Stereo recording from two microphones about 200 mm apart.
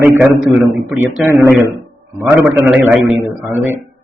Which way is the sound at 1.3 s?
5° right (ahead or behind).